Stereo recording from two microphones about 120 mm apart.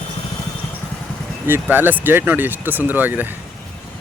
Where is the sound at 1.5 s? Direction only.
15° right (ahead or behind).